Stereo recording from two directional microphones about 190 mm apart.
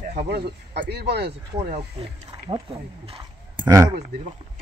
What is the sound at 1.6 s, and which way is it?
Speech, 35° right (ahead or behind).